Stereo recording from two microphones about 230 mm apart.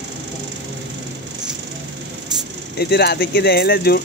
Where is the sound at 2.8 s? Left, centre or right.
Left.